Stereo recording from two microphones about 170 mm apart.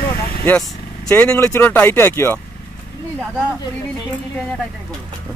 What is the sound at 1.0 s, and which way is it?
Speech, 10° left (ahead or behind).